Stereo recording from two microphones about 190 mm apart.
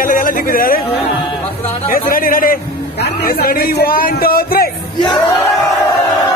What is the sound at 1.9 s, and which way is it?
A man's voice, 50° left (ahead or behind).